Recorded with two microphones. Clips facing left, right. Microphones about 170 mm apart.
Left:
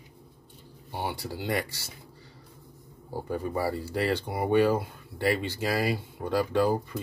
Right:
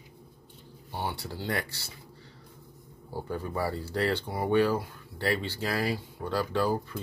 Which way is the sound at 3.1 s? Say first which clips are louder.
Left 3 dB; 15° left (ahead or behind).